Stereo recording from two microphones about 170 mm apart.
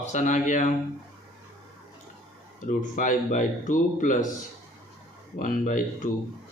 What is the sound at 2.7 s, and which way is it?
Speech, 50° left (ahead or behind).